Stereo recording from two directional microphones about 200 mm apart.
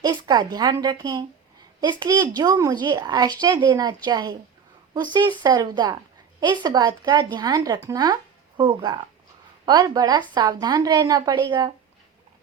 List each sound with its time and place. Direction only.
0.0 s a woman's voice: 20° right (ahead or behind)